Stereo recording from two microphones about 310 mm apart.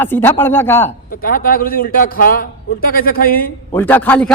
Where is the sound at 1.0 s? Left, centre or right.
Left.